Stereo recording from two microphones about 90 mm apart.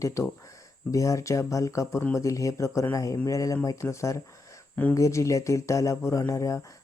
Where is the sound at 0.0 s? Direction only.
35° left (ahead or behind).